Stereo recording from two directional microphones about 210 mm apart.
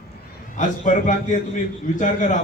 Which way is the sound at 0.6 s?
35° left (ahead or behind).